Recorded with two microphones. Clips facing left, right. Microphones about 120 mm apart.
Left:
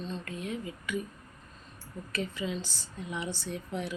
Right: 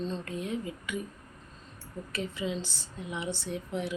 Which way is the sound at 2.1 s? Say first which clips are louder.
Even; 20° right (ahead or behind).